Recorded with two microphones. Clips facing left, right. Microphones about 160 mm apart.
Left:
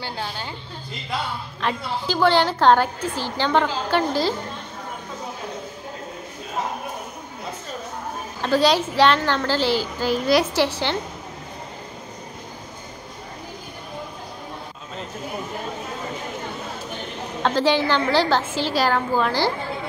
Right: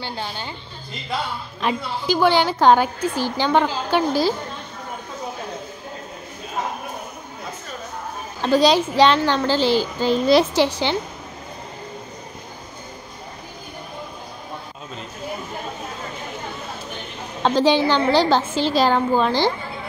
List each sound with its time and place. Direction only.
0.0 s a woman's voice: 5° left (ahead or behind)
1.6 s a woman's voice: 15° right (ahead or behind)
8.4 s a woman's voice: 15° right (ahead or behind)
17.4 s a woman's voice: 15° right (ahead or behind)